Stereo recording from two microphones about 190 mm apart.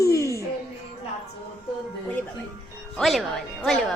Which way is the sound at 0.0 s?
15° left (ahead or behind).